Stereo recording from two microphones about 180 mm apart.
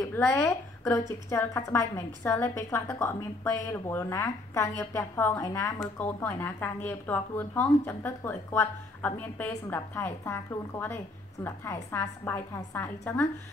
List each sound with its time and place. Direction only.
0.0 s a woman's voice: 15° left (ahead or behind)